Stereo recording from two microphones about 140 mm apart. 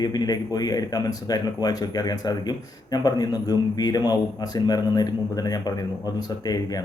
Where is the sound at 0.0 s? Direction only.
30° left (ahead or behind).